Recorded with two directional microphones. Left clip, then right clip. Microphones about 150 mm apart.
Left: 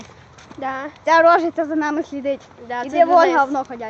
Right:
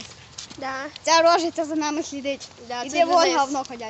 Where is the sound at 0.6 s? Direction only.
30° left (ahead or behind).